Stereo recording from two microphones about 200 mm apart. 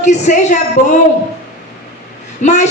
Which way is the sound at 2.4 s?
35° left (ahead or behind).